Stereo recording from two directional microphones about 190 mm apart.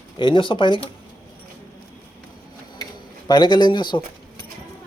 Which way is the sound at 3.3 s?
25° left (ahead or behind).